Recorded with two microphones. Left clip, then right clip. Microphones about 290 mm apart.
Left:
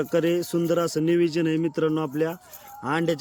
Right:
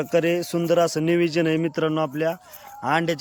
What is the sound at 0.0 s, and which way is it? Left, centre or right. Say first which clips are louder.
A man's voice: right 2 dB; centre.